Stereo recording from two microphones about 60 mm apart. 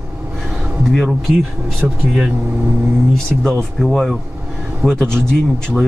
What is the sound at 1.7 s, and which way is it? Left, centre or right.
Speech, centre.